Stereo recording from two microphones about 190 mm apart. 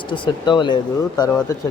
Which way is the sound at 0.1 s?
25° left (ahead or behind).